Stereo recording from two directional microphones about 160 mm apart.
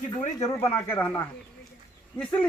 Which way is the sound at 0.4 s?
15° left (ahead or behind).